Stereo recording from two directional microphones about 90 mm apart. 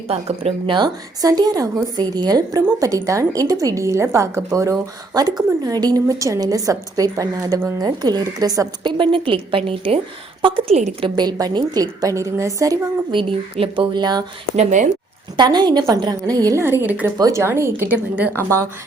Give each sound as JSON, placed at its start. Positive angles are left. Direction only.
{"t": 0.3, "sound": "speech", "side_deg": -90}
{"t": 0.8, "sound": "a woman's voice", "side_deg": -45}
{"t": 8.8, "sound": "a woman's voice", "side_deg": -60}
{"t": 10.4, "sound": "a woman's voice", "side_deg": -75}
{"t": 11.1, "sound": "a woman's voice", "side_deg": -50}
{"t": 13.1, "sound": "speech", "side_deg": -70}
{"t": 15.4, "sound": "a woman's voice", "side_deg": -55}
{"t": 16.6, "sound": "speech", "side_deg": -25}
{"t": 17.2, "sound": "speech", "side_deg": -35}